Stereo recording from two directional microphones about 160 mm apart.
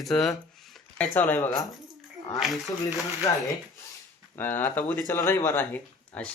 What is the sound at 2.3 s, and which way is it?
Speech, centre (ahead or behind).